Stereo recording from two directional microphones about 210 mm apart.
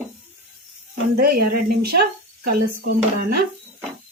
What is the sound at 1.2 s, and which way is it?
Speech, 45° right (ahead or behind).